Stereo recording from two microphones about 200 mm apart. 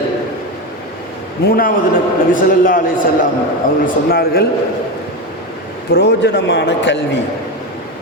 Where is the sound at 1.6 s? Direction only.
45° left (ahead or behind).